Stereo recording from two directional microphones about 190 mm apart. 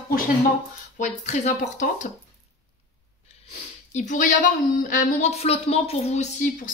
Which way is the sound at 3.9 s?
40° left (ahead or behind).